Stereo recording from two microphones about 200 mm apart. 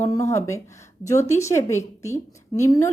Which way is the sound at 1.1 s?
35° left (ahead or behind).